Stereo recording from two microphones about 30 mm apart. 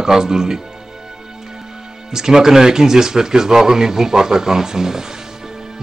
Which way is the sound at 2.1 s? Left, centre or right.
Centre.